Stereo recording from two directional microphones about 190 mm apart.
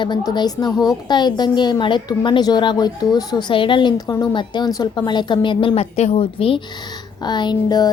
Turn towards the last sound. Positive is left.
turn(degrees=20)  # may be behind; listen again after turning